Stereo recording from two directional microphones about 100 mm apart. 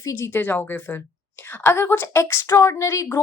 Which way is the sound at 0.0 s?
25° left (ahead or behind).